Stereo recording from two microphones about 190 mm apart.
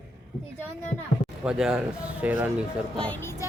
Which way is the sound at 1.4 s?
5° right (ahead or behind).